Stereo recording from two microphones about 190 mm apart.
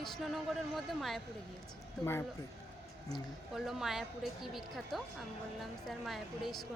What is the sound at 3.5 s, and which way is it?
Speech, centre (ahead or behind).